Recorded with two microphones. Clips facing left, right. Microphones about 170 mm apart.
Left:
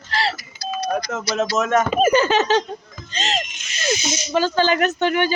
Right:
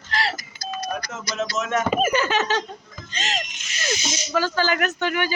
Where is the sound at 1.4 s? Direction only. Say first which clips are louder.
Left 5 dB; 45° left (ahead or behind).